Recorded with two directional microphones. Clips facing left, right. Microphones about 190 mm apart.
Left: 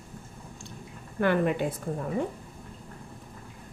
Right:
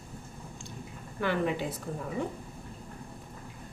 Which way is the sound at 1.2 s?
55° left (ahead or behind).